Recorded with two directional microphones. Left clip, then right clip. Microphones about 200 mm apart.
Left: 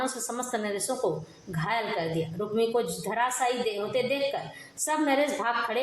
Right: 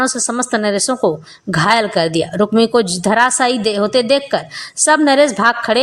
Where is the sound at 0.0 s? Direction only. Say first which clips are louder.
Right 14 dB; 40° right (ahead or behind).